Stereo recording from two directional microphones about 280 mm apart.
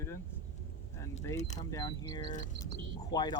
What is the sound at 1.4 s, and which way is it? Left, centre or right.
Speech, left.